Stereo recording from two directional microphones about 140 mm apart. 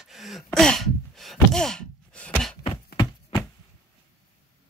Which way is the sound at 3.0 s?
35° left (ahead or behind).